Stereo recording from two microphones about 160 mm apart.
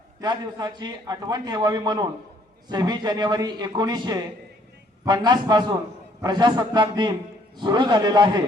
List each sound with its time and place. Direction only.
0.2 s a man's voice: 25° right (ahead or behind)